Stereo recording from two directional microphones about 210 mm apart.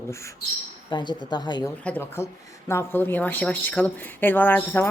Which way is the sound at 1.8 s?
10° left (ahead or behind).